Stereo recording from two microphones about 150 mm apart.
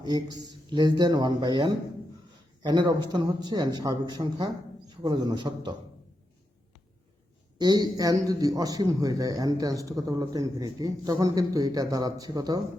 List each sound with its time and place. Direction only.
0.0 s a man's voice: 30° right (ahead or behind)
7.6 s a man's voice: 25° right (ahead or behind)